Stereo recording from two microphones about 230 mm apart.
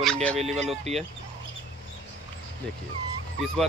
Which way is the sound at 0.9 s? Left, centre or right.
Right.